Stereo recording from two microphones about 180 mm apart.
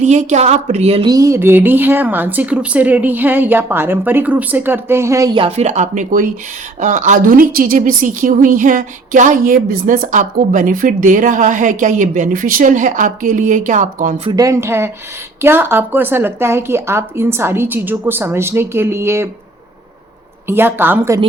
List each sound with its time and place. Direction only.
0.0 s a woman's voice: 40° right (ahead or behind)
1.1 s a woman's voice: 15° right (ahead or behind); by 14.2 s 45° right (ahead or behind)
14.3 s a woman's voice: 20° right (ahead or behind)
20.5 s a woman's voice: 10° right (ahead or behind)